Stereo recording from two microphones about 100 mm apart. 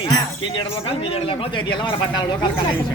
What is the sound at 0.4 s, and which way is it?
A man's voice, 60° left (ahead or behind).